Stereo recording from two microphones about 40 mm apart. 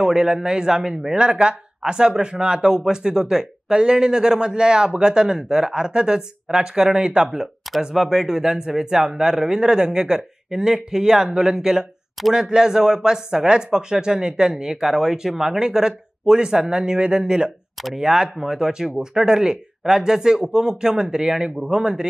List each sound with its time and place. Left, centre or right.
0.0 s speech: centre
7.9 s speech: centre